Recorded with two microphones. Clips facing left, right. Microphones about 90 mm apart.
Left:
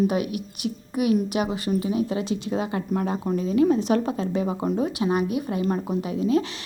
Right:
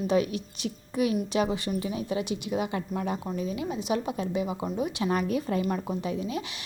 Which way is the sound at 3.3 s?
40° left (ahead or behind).